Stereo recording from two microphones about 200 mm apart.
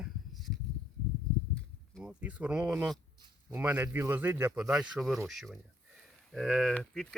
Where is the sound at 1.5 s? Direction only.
5° left (ahead or behind).